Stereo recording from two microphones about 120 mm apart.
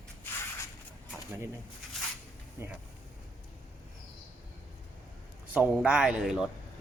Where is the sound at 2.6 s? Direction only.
20° right (ahead or behind).